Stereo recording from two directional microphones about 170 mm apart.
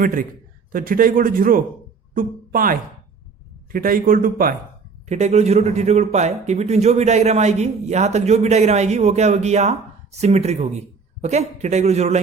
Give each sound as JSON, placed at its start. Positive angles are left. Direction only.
{"t": 0.0, "sound": "a man's voice", "side_deg": -55}
{"t": 5.0, "sound": "a man's voice", "side_deg": -40}